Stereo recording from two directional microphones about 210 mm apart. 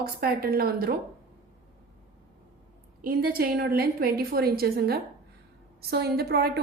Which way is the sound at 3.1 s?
45° right (ahead or behind).